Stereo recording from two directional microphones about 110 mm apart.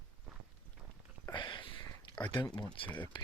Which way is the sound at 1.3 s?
45° left (ahead or behind).